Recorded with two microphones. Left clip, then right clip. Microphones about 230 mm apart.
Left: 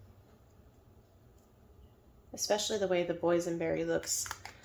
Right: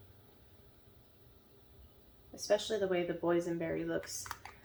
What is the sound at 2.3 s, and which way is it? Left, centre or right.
Speech, left.